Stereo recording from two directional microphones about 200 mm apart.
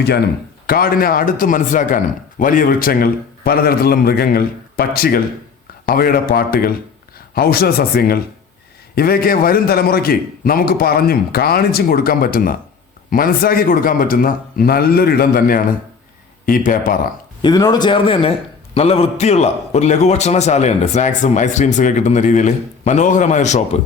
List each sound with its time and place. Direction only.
0.7 s speech: 45° left (ahead or behind)
17.4 s a man's voice: 20° left (ahead or behind); by 23.6 s 35° left (ahead or behind)